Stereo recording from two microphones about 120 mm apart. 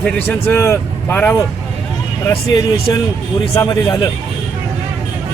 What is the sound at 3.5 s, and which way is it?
Speech, 30° left (ahead or behind).